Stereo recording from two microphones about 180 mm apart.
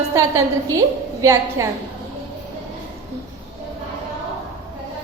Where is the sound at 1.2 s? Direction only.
15° right (ahead or behind).